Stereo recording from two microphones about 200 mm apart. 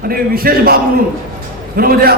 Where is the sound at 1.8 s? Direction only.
50° right (ahead or behind).